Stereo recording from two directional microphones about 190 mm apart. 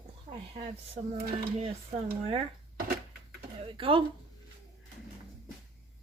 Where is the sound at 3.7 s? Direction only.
25° right (ahead or behind).